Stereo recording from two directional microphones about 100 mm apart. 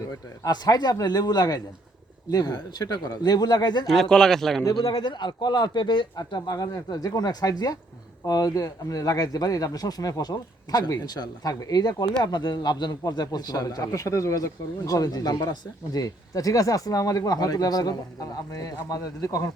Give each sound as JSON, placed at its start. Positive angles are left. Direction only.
{"t": 0.4, "sound": "speech", "side_deg": 40}
{"t": 3.8, "sound": "speech", "side_deg": 5}
{"t": 4.7, "sound": "speech", "side_deg": 45}